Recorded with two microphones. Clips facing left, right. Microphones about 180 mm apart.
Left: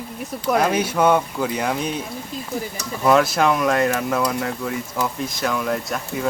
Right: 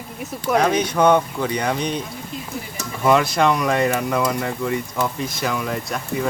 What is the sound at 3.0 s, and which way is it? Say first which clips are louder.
Speech: even; centre (ahead or behind).